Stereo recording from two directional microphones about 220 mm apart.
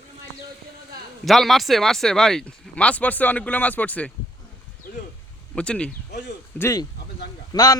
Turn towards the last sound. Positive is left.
turn(degrees=15)  # may be behind; listen again after turning